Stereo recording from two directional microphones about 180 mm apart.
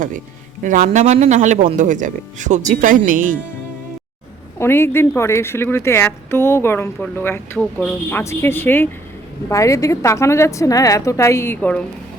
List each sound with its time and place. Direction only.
0.6 s a man's voice: 45° right (ahead or behind)
4.6 s a woman's voice: 15° left (ahead or behind)